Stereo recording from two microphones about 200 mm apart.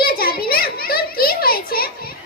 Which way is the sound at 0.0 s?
50° left (ahead or behind).